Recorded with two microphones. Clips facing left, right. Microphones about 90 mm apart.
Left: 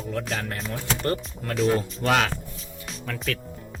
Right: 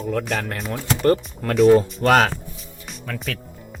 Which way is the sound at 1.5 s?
5° right (ahead or behind).